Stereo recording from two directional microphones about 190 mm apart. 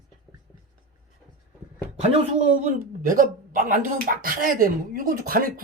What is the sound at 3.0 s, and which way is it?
Speech, 45° right (ahead or behind).